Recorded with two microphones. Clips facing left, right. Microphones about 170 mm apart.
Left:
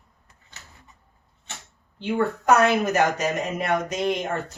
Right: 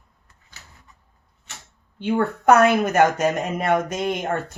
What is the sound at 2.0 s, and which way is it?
A woman's voice, 55° right (ahead or behind).